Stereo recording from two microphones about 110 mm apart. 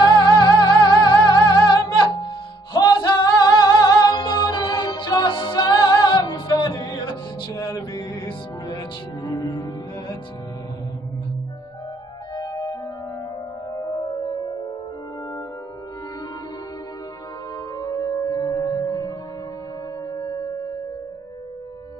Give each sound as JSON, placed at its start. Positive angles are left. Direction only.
{"t": 0.0, "sound": "music", "side_deg": 40}
{"t": 12.4, "sound": "music", "side_deg": 35}
{"t": 17.7, "sound": "music", "side_deg": 30}